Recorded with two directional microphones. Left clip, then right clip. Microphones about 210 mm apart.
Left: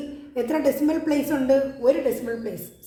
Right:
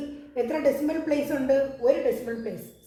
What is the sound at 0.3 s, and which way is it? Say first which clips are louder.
A woman's voice: left 2 dB; 45° left (ahead or behind).